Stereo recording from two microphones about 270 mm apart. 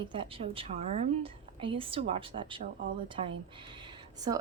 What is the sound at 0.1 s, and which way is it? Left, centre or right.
A woman's voice, centre.